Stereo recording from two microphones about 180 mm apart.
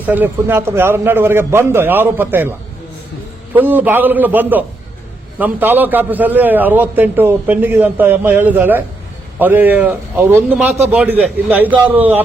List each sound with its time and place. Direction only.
0.0 s a man's voice: 10° right (ahead or behind)